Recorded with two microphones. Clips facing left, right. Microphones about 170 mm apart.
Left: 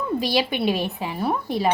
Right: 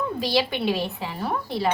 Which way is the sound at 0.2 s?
15° left (ahead or behind).